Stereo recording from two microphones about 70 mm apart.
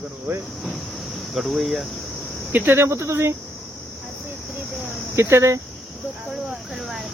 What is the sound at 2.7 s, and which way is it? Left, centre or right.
Speech, right.